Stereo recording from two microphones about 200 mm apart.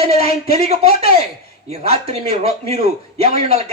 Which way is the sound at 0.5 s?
30° right (ahead or behind).